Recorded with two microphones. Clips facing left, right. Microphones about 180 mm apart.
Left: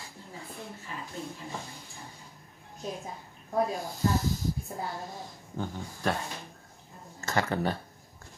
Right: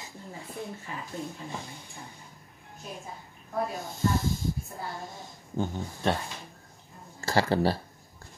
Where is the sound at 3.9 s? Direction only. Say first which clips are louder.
Even; 25° right (ahead or behind).